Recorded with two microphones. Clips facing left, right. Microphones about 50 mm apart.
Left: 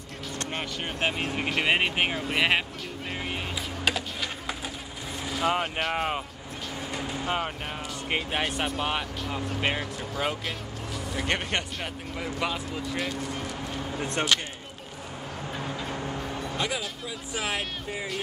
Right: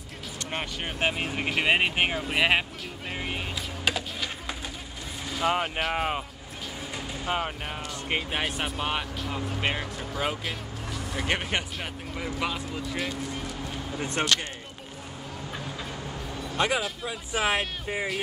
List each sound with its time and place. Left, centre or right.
0.5 s speech: centre
3.1 s vehicle: centre
5.2 s speech: centre
15.6 s a sound: left
16.5 s speech: right
17.3 s speech: right